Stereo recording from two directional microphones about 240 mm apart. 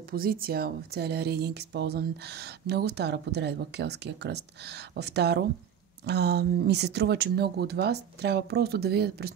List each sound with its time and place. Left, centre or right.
0.1 s speech: right